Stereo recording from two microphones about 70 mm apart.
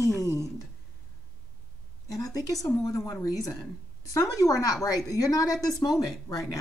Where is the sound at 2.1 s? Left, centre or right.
Left.